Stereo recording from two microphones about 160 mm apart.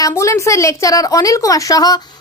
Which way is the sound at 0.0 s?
20° left (ahead or behind).